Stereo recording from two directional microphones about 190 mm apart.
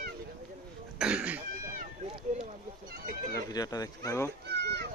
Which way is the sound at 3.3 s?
20° left (ahead or behind).